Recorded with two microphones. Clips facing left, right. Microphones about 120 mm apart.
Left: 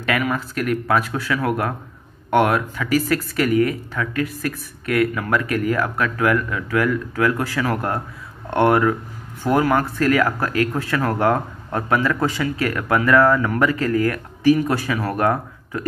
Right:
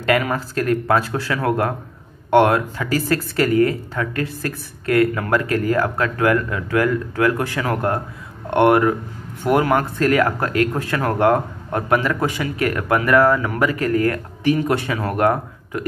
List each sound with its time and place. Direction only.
0.0 s speech: 30° right (ahead or behind)